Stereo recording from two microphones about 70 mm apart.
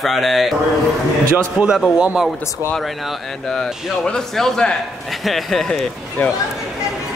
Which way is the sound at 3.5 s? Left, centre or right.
Centre.